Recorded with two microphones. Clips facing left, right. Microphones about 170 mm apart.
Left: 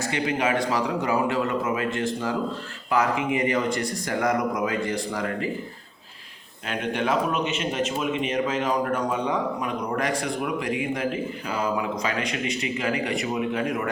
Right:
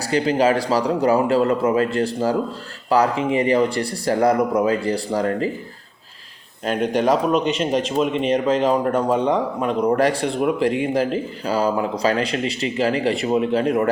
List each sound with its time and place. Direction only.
0.0 s speech: 35° right (ahead or behind)
6.7 s speech: 35° right (ahead or behind)